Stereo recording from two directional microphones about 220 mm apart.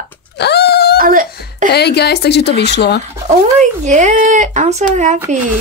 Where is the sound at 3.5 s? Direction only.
30° right (ahead or behind).